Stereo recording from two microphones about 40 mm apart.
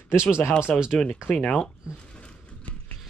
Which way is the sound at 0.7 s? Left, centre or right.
Centre.